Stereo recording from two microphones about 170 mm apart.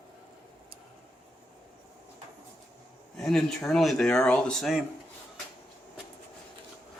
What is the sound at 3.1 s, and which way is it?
Speech, 5° left (ahead or behind).